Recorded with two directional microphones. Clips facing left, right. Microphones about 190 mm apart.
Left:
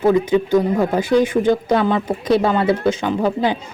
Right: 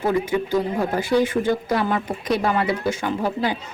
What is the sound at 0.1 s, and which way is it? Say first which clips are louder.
Speech: left 5 dB; 20° left (ahead or behind).